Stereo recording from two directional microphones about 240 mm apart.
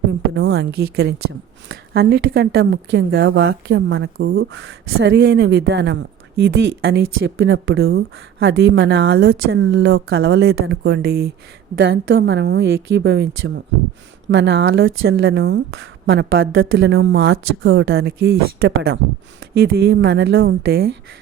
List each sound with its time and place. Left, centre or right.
0.3 s a woman's voice: right